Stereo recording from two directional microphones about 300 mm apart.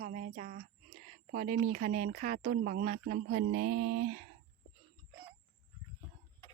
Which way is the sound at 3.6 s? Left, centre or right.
Right.